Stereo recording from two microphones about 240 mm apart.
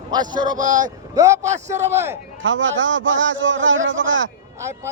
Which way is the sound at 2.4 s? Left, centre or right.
Right.